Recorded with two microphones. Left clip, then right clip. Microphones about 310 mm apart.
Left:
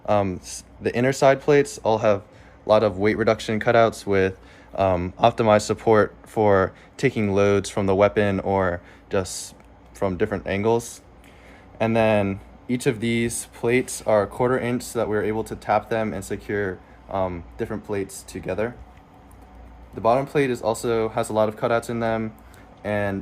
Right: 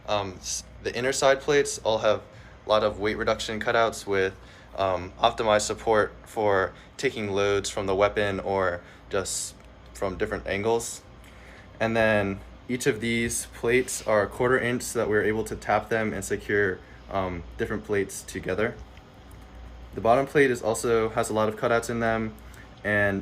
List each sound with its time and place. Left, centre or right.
0.0 s speech: left
20.0 s speech: centre